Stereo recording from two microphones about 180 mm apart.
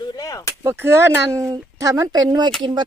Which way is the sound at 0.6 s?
15° right (ahead or behind).